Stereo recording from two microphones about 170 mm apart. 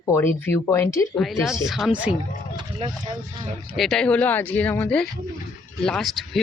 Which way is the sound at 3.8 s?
5° left (ahead or behind).